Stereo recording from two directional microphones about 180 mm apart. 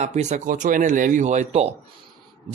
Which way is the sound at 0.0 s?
40° right (ahead or behind).